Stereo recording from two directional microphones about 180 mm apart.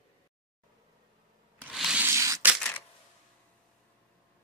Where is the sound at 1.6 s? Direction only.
5° right (ahead or behind).